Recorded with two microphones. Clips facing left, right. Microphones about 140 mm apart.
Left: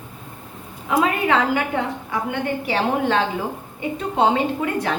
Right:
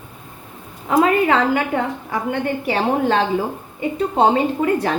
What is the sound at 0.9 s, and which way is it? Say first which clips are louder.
A woman's voice: right 4 dB; 45° right (ahead or behind).